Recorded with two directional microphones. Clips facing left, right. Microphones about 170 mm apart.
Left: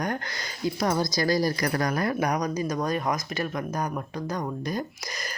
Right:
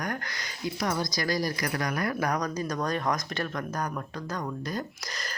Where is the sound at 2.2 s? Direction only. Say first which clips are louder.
Left 3 dB; 15° left (ahead or behind).